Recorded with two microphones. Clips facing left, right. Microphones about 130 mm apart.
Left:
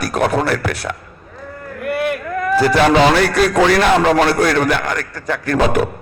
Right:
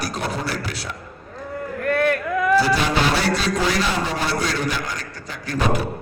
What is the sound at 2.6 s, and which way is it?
A man's voice, 70° left (ahead or behind).